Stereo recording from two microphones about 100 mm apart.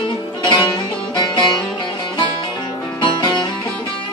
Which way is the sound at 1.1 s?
50° left (ahead or behind).